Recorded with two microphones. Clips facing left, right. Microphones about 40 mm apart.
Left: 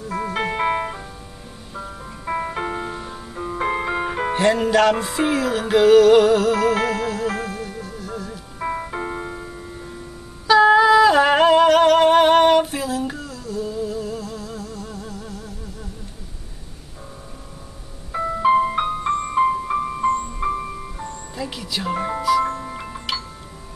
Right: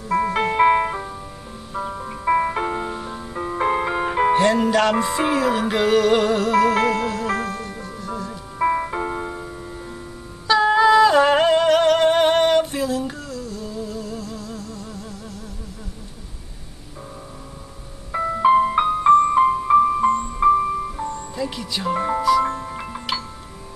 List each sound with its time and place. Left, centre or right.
0.1 s music: centre
2.6 s music: centre
8.5 s music: centre
9.0 s music: centre
10.4 s a sound: centre
18.1 s music: centre